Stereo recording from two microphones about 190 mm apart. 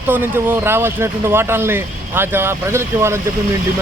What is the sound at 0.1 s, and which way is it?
Speech, 10° right (ahead or behind).